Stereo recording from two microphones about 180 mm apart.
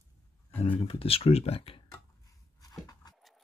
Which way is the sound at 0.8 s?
30° left (ahead or behind).